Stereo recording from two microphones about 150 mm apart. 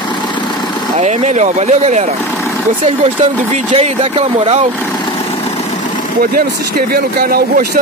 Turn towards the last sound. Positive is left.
turn(degrees=-80)